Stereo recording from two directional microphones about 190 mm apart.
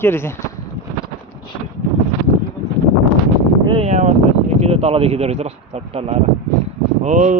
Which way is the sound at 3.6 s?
30° right (ahead or behind).